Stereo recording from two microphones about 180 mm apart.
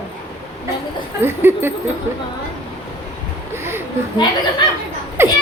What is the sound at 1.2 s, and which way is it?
Speech, 10° right (ahead or behind).